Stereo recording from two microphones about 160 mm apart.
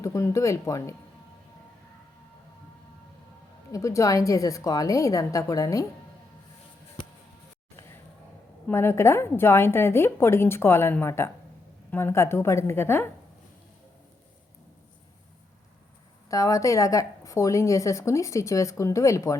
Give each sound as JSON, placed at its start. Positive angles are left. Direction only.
{"t": 0.0, "sound": "a woman's voice", "side_deg": 20}
{"t": 3.7, "sound": "a woman's voice", "side_deg": 20}
{"t": 8.6, "sound": "a woman's voice", "side_deg": 15}
{"t": 16.3, "sound": "a woman's voice", "side_deg": 20}